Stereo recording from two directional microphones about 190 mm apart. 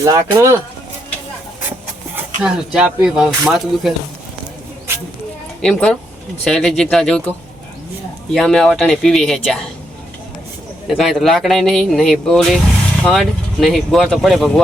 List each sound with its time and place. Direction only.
0.0 s speech: 20° right (ahead or behind)
2.1 s speech: 5° right (ahead or behind)
5.6 s speech: 5° left (ahead or behind)
10.8 s speech: centre (ahead or behind)